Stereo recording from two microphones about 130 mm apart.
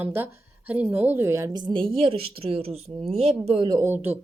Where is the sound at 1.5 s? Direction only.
40° right (ahead or behind).